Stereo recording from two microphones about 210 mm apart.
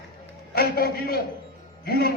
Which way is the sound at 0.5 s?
45° left (ahead or behind).